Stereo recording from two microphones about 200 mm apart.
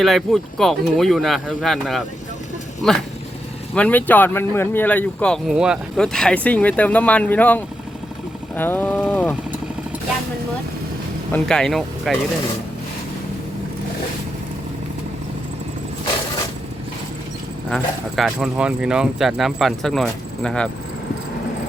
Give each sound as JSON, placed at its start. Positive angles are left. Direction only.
{"t": 0.0, "sound": "speech", "side_deg": 0}
{"t": 3.8, "sound": "speech", "side_deg": 10}
{"t": 11.3, "sound": "speech", "side_deg": 5}
{"t": 17.7, "sound": "speech", "side_deg": 0}